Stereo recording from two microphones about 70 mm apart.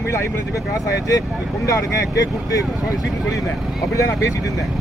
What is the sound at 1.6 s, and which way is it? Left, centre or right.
Speech, left.